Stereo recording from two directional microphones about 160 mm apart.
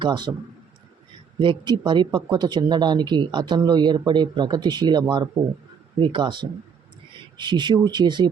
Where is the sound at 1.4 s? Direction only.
30° right (ahead or behind).